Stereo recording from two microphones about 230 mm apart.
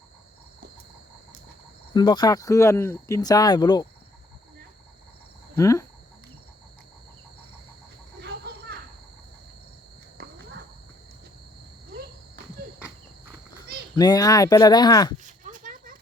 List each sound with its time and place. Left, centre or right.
1.9 s speech: centre
5.5 s speech: centre
8.2 s cricket: right
13.9 s speech: centre
15.2 s a sound: right